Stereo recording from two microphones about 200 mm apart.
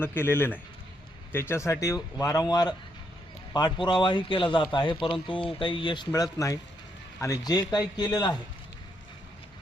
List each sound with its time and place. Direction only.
0.0 s a man's voice: 10° left (ahead or behind)